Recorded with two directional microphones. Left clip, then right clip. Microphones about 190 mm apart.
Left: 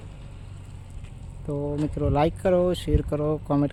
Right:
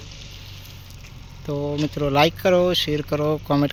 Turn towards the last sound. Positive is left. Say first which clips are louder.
# right 4 dB
turn(degrees=0)  # may be behind; listen again after turning